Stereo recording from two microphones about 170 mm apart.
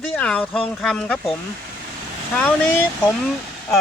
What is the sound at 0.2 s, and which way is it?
Speech, 5° left (ahead or behind).